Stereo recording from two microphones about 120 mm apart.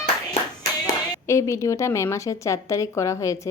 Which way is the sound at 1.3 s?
25° left (ahead or behind).